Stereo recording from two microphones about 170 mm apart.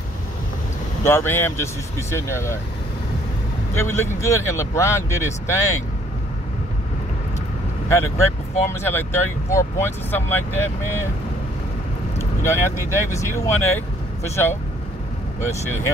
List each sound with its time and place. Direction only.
1.0 s speech: 15° left (ahead or behind)
3.7 s speech: 15° left (ahead or behind)
7.9 s speech: 15° left (ahead or behind)
12.4 s speech: 15° left (ahead or behind)